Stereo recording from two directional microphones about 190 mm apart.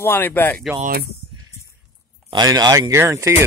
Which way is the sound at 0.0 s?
10° left (ahead or behind).